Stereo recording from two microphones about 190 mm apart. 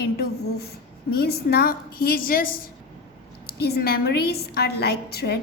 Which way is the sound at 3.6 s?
55° left (ahead or behind).